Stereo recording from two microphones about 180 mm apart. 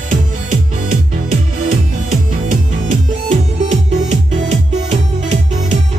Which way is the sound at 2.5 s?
40° right (ahead or behind).